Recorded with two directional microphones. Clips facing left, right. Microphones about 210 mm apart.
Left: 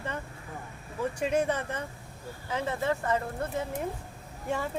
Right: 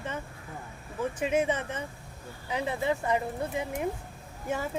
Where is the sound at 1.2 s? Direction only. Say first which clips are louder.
Even; 5° right (ahead or behind).